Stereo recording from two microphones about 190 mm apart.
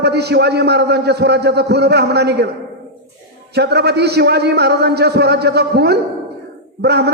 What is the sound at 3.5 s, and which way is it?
A man's voice, 60° right (ahead or behind).